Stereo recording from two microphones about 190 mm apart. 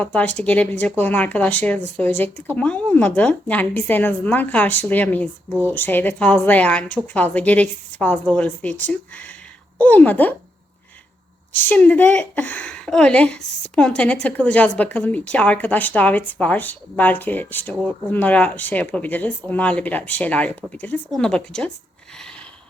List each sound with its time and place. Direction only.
0.0 s a woman's voice: 5° left (ahead or behind)
11.5 s a woman's voice: 10° left (ahead or behind)